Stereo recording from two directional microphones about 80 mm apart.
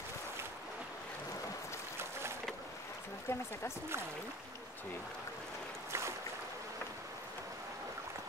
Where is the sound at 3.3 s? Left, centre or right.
Left.